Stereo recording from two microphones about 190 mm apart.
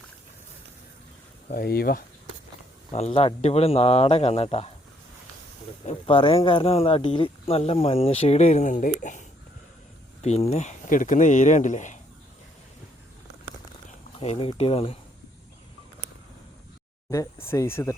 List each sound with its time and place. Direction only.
1.5 s speech: 50° left (ahead or behind)
2.9 s speech: 30° left (ahead or behind)
5.8 s speech: 30° left (ahead or behind)
14.2 s speech: 30° left (ahead or behind)
17.1 s speech: 15° left (ahead or behind)